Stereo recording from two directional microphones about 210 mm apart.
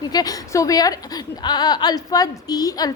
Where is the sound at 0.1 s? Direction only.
15° left (ahead or behind).